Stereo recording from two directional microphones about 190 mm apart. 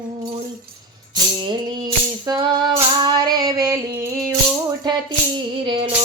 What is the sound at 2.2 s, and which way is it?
Music, 20° right (ahead or behind).